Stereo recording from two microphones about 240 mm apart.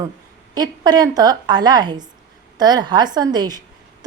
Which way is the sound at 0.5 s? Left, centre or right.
Centre.